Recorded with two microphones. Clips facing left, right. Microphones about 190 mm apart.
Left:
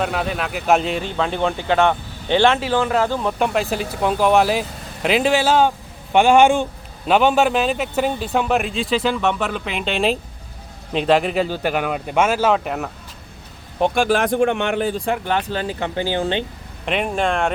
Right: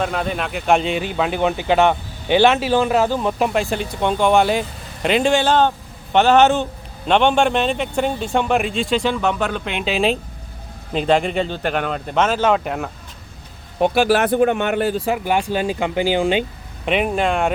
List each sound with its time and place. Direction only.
0.0 s a man's voice: centre (ahead or behind)
1.0 s speech: 10° right (ahead or behind)
3.0 s a man's voice: 5° right (ahead or behind)
16.8 s a man's voice: centre (ahead or behind)